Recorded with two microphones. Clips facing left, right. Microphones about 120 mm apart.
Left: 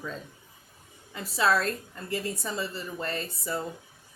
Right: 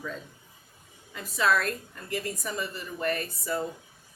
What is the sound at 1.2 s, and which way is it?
A woman's voice, 30° left (ahead or behind).